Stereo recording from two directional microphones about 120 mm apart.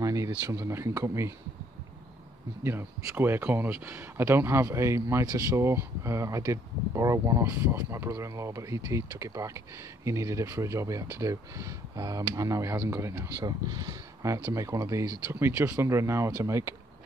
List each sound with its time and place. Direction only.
0.0 s a sound: 30° right (ahead or behind)
0.5 s speech: 25° right (ahead or behind)
2.6 s speech: 20° right (ahead or behind)